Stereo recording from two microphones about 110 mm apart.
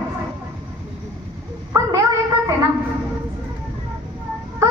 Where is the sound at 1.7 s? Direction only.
35° right (ahead or behind).